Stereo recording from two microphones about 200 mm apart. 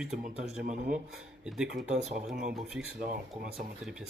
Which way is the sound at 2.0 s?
35° right (ahead or behind).